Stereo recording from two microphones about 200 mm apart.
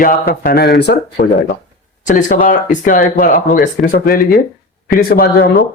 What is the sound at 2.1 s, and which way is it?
Speech, 40° left (ahead or behind).